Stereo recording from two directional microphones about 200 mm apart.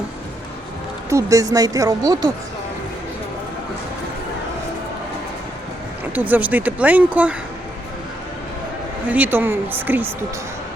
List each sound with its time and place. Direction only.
1.1 s speech: 15° right (ahead or behind)
6.1 s speech: 10° right (ahead or behind)
9.0 s speech: 10° right (ahead or behind)